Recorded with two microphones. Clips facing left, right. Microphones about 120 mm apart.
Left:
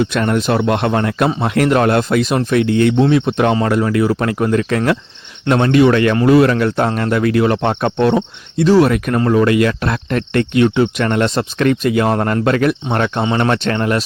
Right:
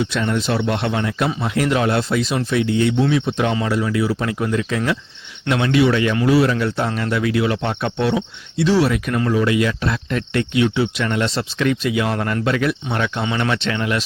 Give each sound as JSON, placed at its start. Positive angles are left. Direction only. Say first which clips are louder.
{"t": 0.0, "sound": "speech", "louder": "left 5 dB", "side_deg": 55}
{"t": 5.5, "sound": "speech", "louder": "left 5 dB", "side_deg": 45}